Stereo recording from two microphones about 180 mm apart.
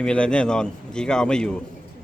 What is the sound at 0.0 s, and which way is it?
Speech, 5° left (ahead or behind).